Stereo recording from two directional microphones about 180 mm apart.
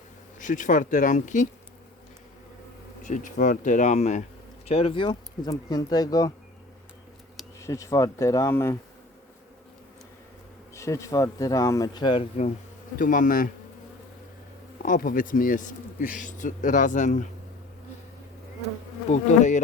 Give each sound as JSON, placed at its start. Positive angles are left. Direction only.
{"t": 0.3, "sound": "speech", "side_deg": 45}
{"t": 3.0, "sound": "speech", "side_deg": 45}
{"t": 7.6, "sound": "speech", "side_deg": 15}
{"t": 10.8, "sound": "speech", "side_deg": 15}
{"t": 13.0, "sound": "speech", "side_deg": 45}
{"t": 14.8, "sound": "speech", "side_deg": 50}
{"t": 19.0, "sound": "bee", "side_deg": 40}